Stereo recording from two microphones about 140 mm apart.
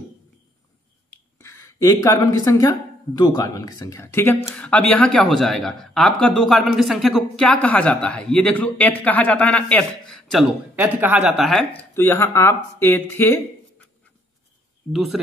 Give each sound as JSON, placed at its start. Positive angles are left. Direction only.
{"t": 1.1, "sound": "a sound", "side_deg": 20}
{"t": 3.2, "sound": "speech", "side_deg": 30}
{"t": 10.8, "sound": "speech", "side_deg": -10}
{"t": 11.9, "sound": "speech", "side_deg": 15}
{"t": 14.9, "sound": "speech", "side_deg": 0}